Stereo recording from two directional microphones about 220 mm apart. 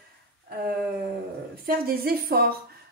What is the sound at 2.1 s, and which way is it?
Speech, 45° right (ahead or behind).